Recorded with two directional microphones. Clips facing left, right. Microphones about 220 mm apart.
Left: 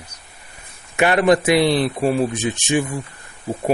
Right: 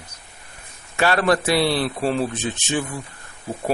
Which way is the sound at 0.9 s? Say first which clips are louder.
Left 4 dB; 15° left (ahead or behind).